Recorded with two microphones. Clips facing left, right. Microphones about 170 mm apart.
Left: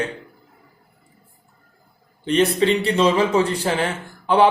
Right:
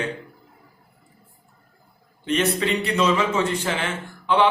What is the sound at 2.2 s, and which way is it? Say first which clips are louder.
Speech: left 5 dB; 35° left (ahead or behind).